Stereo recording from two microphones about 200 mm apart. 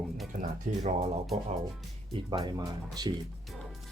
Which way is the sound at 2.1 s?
20° right (ahead or behind).